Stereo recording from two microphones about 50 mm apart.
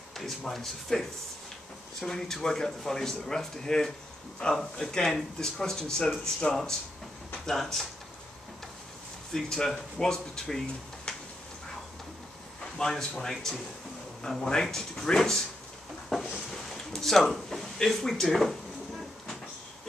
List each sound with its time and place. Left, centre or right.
0.1 s speech: centre
9.3 s speech: centre
12.7 s speech: centre
16.1 s a sound: centre